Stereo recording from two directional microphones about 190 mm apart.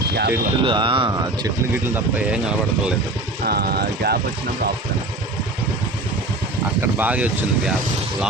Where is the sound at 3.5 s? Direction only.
55° right (ahead or behind).